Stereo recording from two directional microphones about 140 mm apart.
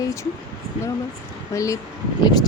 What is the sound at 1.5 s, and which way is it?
Speech, 25° left (ahead or behind).